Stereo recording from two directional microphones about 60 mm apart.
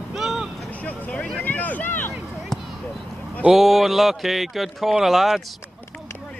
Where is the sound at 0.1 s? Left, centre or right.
Centre.